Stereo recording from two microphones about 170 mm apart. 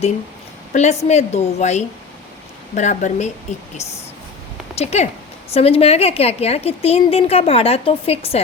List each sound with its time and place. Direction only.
0.7 s a woman's voice: 40° left (ahead or behind)
4.7 s a woman's voice: 40° left (ahead or behind)